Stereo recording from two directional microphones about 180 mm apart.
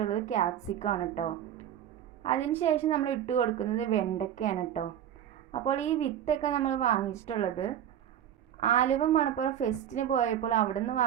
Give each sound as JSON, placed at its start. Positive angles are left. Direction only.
{"t": 0.0, "sound": "a woman's voice", "side_deg": 40}